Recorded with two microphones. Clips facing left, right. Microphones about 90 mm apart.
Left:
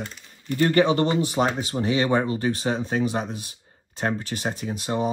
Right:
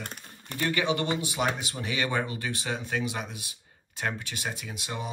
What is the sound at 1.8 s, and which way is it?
Speech, 30° left (ahead or behind).